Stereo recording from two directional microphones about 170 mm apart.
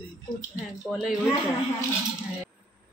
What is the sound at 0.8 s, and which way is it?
Speech, centre (ahead or behind).